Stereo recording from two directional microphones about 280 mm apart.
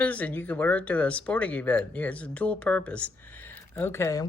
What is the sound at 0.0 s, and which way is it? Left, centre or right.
Speech, centre.